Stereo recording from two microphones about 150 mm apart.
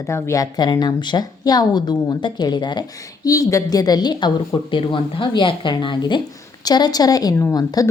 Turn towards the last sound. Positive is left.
turn(degrees=25)  # may be behind; listen again after turning